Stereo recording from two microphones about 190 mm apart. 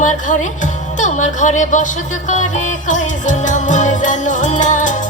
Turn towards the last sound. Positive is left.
turn(degrees=40)  # may be behind; listen again after turning